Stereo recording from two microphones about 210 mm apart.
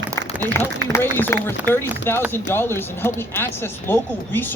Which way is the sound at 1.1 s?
10° left (ahead or behind).